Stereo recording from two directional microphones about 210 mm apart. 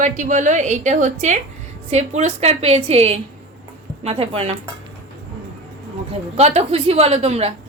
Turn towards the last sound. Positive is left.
turn(degrees=-30)  # may be behind; listen again after turning